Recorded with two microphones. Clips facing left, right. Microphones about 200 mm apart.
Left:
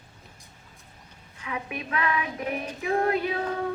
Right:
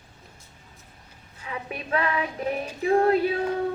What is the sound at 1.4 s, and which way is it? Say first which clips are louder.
A woman's voice: even; 35° right (ahead or behind).